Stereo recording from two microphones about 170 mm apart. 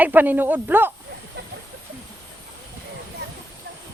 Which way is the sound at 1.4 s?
75° right (ahead or behind).